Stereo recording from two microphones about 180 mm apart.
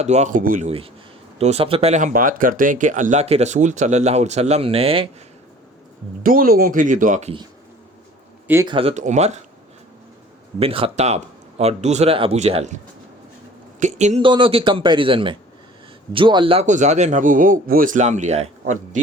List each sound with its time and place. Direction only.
0.0 s speech: 40° right (ahead or behind)
1.4 s speech: 35° right (ahead or behind)
6.2 s speech: 50° right (ahead or behind)
8.6 s speech: 30° right (ahead or behind)
10.6 s speech: 30° right (ahead or behind)
14.3 s speech: 30° right (ahead or behind)
16.6 s speech: 40° right (ahead or behind)